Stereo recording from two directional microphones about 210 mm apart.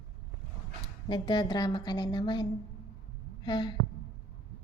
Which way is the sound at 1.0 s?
20° left (ahead or behind).